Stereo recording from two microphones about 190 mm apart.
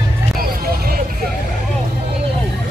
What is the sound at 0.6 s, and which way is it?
Vehicle, 50° right (ahead or behind).